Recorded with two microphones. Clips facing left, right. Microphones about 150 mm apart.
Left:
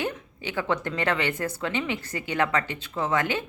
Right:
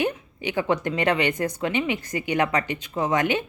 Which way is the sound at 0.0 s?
15° right (ahead or behind).